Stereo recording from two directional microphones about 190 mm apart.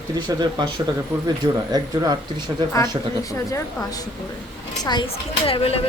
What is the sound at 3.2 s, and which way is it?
Speech, 15° left (ahead or behind).